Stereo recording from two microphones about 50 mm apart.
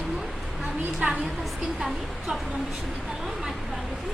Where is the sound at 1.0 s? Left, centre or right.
Right.